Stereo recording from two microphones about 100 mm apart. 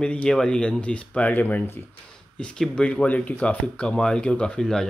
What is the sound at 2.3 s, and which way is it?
Speech, 5° left (ahead or behind).